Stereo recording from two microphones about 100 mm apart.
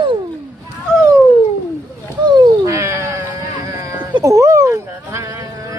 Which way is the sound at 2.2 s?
50° right (ahead or behind).